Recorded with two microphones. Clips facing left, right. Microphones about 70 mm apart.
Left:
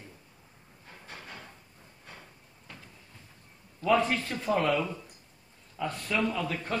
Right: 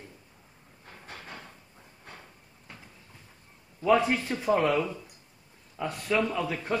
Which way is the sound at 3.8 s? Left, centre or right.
Centre.